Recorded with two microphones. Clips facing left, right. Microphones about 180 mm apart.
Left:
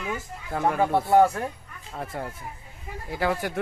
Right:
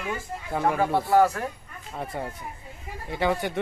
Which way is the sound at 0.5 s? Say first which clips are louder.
Even; centre (ahead or behind).